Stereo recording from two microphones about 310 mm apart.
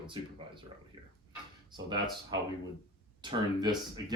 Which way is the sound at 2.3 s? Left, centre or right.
Centre.